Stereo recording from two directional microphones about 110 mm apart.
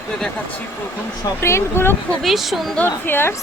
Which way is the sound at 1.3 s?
25° left (ahead or behind).